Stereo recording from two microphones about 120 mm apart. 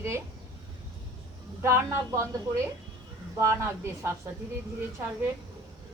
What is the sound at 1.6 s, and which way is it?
Speech, 25° right (ahead or behind).